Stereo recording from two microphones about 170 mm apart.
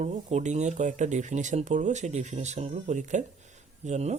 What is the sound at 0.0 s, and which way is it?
Speech, 45° right (ahead or behind).